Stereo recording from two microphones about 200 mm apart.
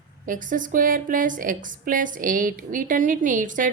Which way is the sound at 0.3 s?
40° right (ahead or behind).